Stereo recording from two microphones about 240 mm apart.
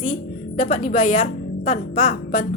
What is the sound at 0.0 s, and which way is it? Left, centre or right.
A woman's voice, left.